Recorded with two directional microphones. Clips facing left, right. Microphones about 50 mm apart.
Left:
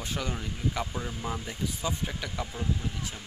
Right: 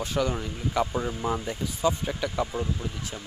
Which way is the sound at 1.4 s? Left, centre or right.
Centre.